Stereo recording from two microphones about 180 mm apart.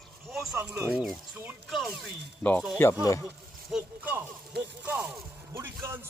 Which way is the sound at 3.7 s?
10° right (ahead or behind).